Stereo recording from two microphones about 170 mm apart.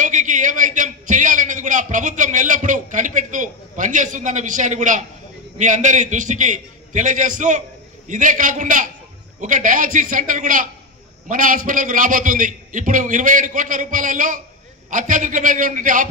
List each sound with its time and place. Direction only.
0.0 s a man's voice: 50° right (ahead or behind)